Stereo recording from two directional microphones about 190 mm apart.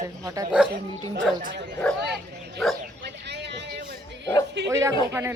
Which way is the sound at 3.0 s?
65° right (ahead or behind).